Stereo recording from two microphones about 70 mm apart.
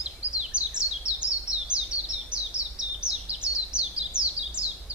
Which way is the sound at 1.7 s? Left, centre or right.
Centre.